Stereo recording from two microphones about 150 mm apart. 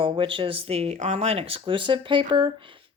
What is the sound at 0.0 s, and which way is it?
Speech, 35° right (ahead or behind).